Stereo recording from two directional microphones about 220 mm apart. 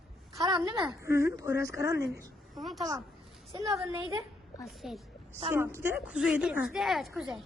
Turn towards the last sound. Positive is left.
turn(degrees=0)  # may be behind; listen again after turning